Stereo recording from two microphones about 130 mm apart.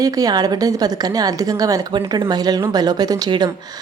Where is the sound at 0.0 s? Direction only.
30° right (ahead or behind).